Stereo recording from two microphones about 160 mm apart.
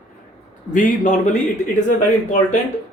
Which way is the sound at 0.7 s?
55° left (ahead or behind).